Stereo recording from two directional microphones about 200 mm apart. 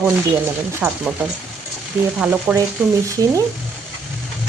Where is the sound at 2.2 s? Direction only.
10° right (ahead or behind).